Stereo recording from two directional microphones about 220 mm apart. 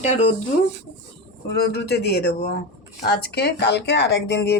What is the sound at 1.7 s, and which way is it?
Speech, 50° left (ahead or behind).